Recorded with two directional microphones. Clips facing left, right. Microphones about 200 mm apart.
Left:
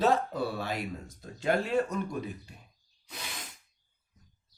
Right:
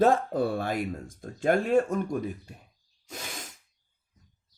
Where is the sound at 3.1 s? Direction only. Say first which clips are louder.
Right 4 dB; 45° right (ahead or behind).